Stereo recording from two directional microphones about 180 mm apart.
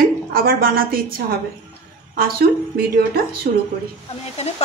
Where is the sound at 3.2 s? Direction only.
55° right (ahead or behind).